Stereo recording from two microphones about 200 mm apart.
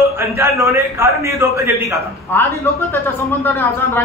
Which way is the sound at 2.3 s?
10° left (ahead or behind).